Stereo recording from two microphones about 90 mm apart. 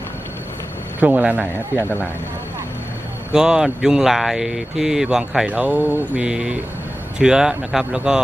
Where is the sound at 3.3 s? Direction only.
5° right (ahead or behind).